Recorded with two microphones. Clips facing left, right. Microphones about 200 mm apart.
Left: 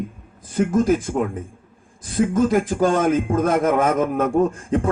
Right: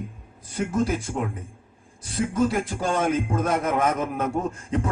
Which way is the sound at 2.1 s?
50° left (ahead or behind).